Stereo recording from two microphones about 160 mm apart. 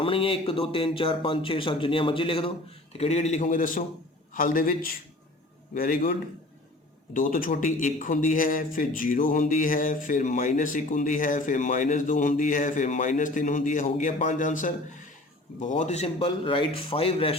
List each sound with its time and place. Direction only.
0.0 s a man's voice: 35° left (ahead or behind); by 14.7 s 50° left (ahead or behind)
15.8 s a man's voice: 45° left (ahead or behind)
16.1 s speech: 35° left (ahead or behind)